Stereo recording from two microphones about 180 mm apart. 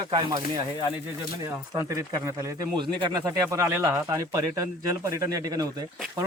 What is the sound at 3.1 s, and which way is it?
Speech, 20° right (ahead or behind).